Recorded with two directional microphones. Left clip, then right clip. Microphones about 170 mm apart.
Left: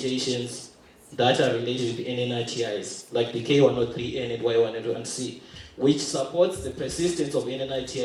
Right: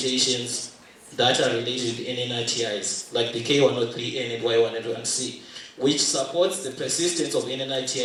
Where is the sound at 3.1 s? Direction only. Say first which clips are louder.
Even; 35° right (ahead or behind).